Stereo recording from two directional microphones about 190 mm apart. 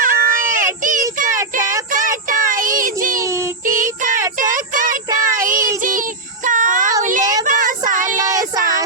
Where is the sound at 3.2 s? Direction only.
15° right (ahead or behind).